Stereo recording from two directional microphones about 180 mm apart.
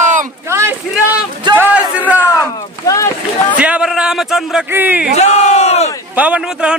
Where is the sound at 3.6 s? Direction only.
5° right (ahead or behind).